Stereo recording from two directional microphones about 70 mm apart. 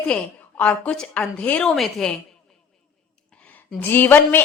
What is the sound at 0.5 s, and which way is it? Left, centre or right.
A woman's voice, centre.